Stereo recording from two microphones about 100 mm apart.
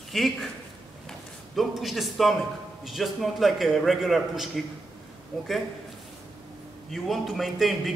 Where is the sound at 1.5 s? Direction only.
Centre (ahead or behind).